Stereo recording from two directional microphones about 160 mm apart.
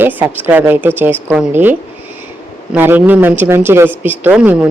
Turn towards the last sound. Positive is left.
turn(degrees=-5)  # may be behind; listen again after turning